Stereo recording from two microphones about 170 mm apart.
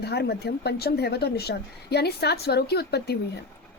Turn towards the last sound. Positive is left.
turn(degrees=75)  # may be behind; listen again after turning